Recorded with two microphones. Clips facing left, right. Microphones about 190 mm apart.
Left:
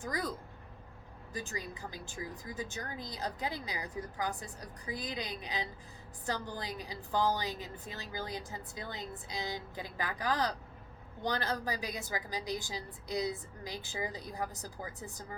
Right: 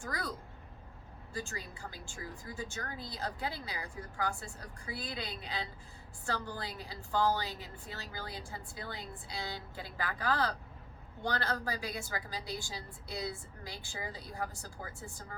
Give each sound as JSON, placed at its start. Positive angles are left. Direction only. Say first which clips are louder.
{"t": 0.0, "sound": "speech", "louder": "left 3 dB", "side_deg": 15}
{"t": 1.3, "sound": "speech", "louder": "left 1 dB", "side_deg": 15}